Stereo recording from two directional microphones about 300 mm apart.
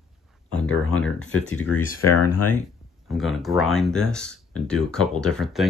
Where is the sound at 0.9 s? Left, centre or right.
Centre.